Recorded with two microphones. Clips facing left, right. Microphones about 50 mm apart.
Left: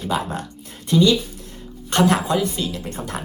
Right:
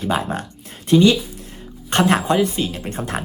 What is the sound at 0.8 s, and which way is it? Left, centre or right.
Speech, right.